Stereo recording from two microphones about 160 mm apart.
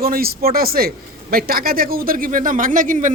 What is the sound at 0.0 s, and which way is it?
A man's voice, 70° right (ahead or behind).